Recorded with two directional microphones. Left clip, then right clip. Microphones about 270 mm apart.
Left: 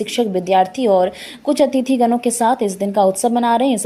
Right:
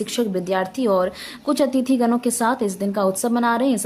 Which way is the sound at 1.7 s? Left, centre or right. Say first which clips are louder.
Left 3 dB; right.